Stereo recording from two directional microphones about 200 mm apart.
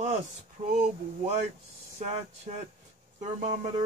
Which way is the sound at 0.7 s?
35° right (ahead or behind).